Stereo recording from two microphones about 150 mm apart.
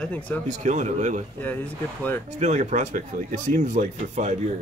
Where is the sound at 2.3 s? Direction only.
50° right (ahead or behind).